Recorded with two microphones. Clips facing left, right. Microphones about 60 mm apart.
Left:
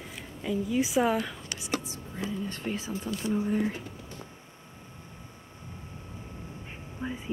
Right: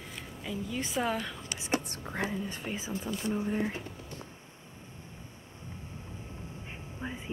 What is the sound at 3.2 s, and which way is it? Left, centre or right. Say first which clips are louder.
Speech: left 4 dB; centre.